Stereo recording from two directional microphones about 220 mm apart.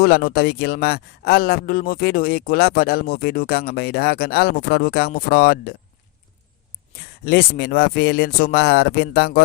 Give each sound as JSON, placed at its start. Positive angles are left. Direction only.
{"t": 0.0, "sound": "speech", "side_deg": 45}
{"t": 7.3, "sound": "speech", "side_deg": 45}